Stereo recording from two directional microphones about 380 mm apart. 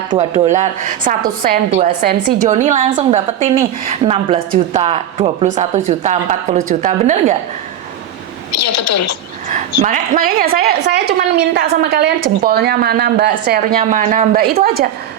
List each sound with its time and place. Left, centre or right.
0.4 s a woman's voice: centre
8.5 s a woman's voice: left
9.5 s a woman's voice: centre